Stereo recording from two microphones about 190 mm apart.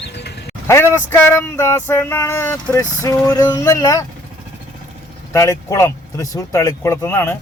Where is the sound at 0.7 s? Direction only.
15° left (ahead or behind).